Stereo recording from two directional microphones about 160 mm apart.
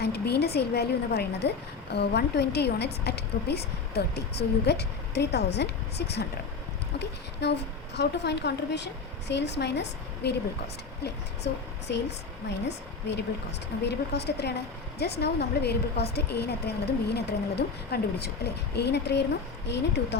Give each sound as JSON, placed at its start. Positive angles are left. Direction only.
{"t": 0.0, "sound": "a woman's voice", "side_deg": 90}